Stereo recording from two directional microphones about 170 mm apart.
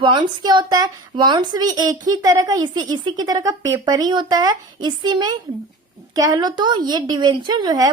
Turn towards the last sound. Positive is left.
turn(degrees=-25)  # may be behind; listen again after turning